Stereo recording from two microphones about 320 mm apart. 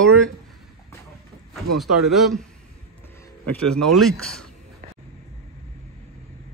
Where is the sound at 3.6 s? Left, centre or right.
Right.